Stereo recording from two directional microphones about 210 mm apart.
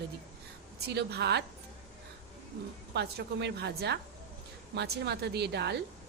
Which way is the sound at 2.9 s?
50° right (ahead or behind).